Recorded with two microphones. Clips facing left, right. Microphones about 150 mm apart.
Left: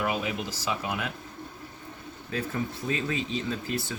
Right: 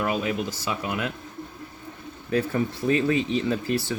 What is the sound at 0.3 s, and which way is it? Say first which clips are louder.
Speech: right 4 dB; 60° right (ahead or behind).